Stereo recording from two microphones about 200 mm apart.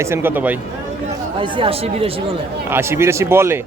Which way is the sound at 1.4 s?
25° right (ahead or behind).